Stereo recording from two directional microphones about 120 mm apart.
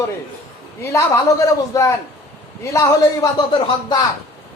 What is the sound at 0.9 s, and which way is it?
A man's voice, 25° left (ahead or behind).